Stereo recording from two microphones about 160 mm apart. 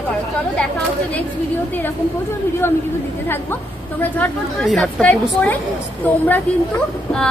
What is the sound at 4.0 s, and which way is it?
A woman's voice, 10° left (ahead or behind).